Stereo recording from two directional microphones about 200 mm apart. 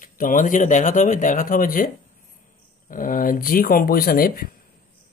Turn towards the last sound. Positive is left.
turn(degrees=45)  # may be behind; listen again after turning